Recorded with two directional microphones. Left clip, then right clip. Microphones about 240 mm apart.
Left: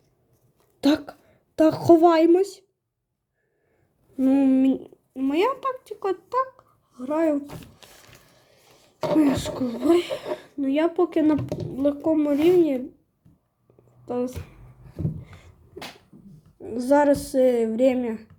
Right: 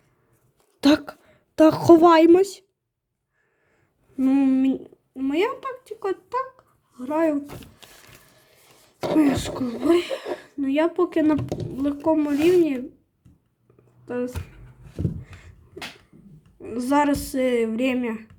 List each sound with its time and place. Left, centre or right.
0.8 s a woman's voice: right
4.2 s a child's voice: centre
9.0 s speech: right
11.3 s speech: right
12.0 s speech: centre
14.0 s speech: centre
16.6 s speech: right